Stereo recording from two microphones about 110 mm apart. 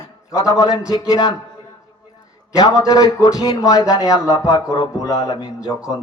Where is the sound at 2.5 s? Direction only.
35° left (ahead or behind).